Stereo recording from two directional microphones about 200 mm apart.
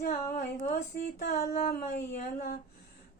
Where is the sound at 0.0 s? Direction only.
40° left (ahead or behind).